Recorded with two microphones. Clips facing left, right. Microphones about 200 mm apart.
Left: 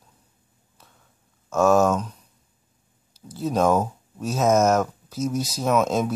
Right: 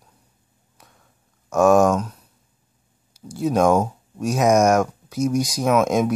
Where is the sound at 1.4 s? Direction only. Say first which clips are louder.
Right 3 dB; 15° right (ahead or behind).